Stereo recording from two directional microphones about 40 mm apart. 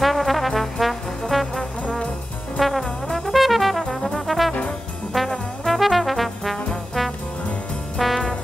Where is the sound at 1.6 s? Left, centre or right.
Left.